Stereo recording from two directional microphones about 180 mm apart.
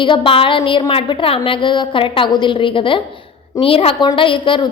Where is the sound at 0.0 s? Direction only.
30° left (ahead or behind).